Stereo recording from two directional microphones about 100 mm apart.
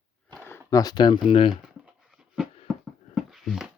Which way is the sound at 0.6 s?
40° left (ahead or behind).